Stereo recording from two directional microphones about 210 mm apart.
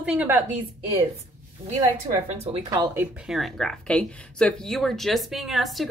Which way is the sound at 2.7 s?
15° right (ahead or behind).